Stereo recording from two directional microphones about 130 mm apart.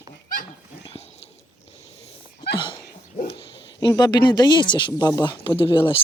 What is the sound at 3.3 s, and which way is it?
Speech, 35° left (ahead or behind).